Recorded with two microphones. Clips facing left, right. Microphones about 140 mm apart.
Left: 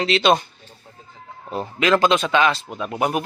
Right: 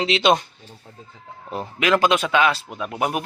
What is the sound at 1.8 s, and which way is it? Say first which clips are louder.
Speech: left 1 dB; 10° right (ahead or behind).